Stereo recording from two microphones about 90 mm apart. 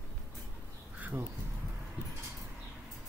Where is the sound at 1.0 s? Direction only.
15° right (ahead or behind).